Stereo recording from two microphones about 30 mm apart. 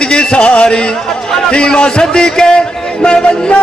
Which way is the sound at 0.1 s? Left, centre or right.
Left.